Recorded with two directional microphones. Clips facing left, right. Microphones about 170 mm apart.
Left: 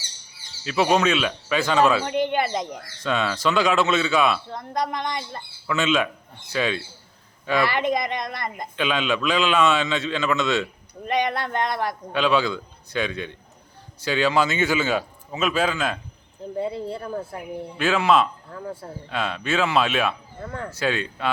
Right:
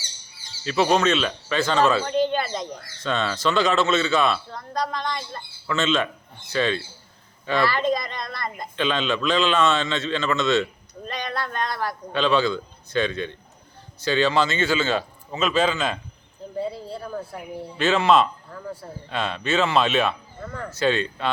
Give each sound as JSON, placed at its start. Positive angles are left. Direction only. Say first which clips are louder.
{"t": 0.6, "sound": "speech", "louder": "even", "side_deg": 5}
{"t": 4.5, "sound": "speech", "louder": "left 1 dB", "side_deg": 20}
{"t": 7.6, "sound": "speech", "louder": "right 1 dB", "side_deg": 20}
{"t": 8.7, "sound": "speech", "louder": "even", "side_deg": 10}
{"t": 12.1, "sound": "speech", "louder": "right 1 dB", "side_deg": 10}
{"t": 16.7, "sound": "speech", "louder": "left 4 dB", "side_deg": 20}
{"t": 17.7, "sound": "speech", "louder": "right 1 dB", "side_deg": 10}